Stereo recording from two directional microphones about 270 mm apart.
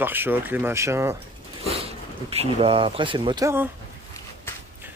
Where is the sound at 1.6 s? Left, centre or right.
Right.